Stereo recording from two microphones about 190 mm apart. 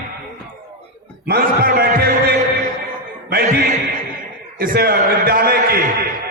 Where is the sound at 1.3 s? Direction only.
55° right (ahead or behind).